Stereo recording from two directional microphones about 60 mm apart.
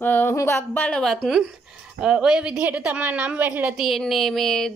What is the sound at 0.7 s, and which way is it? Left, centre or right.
Speech, left.